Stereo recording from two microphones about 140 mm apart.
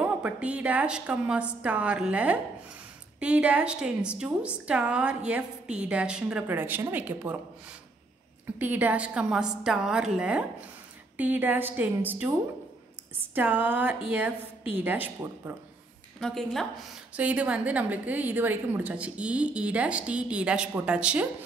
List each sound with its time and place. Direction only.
0.0 s a woman's voice: 10° right (ahead or behind)
8.5 s a woman's voice: 10° right (ahead or behind)
16.2 s a woman's voice: 5° left (ahead or behind)
17.1 s a woman's voice: 10° right (ahead or behind)